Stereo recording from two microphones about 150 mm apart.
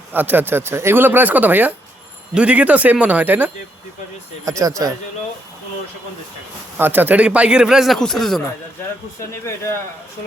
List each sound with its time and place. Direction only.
0.1 s speech: 10° right (ahead or behind)
6.7 s speech: 15° right (ahead or behind); by 8.4 s 5° left (ahead or behind)